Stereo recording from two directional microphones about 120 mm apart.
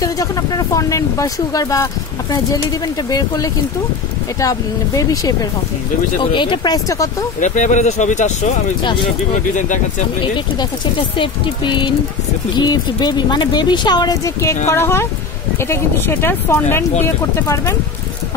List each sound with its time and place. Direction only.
0.0 s speech: 30° left (ahead or behind)
3.1 s speech: 30° left (ahead or behind)
6.3 s speech: 40° left (ahead or behind)
7.3 s speech: 90° left
10.2 s speech: 40° left (ahead or behind); by 17.7 s 25° left (ahead or behind)